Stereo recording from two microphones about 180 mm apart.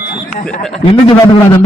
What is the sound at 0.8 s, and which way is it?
Speech, 30° left (ahead or behind).